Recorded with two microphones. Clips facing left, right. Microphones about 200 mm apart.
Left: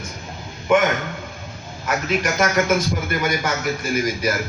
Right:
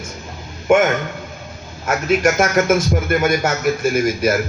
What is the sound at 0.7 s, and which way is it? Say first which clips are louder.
Speech: right 3 dB; 50° right (ahead or behind).